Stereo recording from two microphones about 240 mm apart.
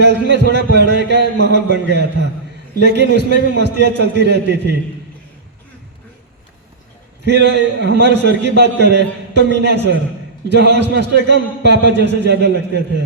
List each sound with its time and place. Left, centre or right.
0.0 s a man's voice: right
7.3 s a man's voice: right